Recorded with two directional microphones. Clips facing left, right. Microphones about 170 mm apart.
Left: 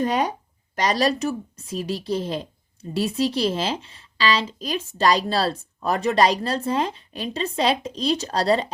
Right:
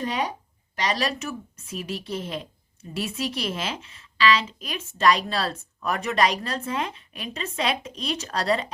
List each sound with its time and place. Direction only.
0.0 s speech: 45° left (ahead or behind)